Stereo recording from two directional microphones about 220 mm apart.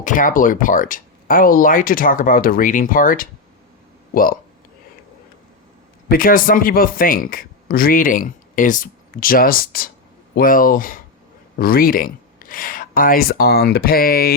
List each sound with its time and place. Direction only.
0.0 s speech: 35° left (ahead or behind)
6.1 s speech: 40° left (ahead or behind)